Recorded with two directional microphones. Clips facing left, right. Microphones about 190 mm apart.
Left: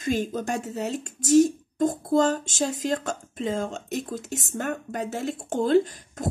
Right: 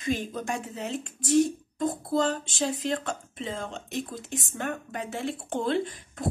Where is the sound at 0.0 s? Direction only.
45° left (ahead or behind).